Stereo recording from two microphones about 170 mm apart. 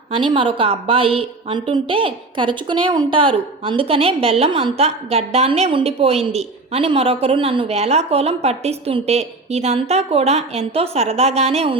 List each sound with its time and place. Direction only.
0.1 s a woman's voice: 30° right (ahead or behind)